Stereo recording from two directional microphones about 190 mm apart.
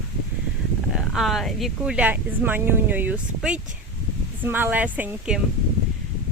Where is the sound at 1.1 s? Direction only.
Centre (ahead or behind).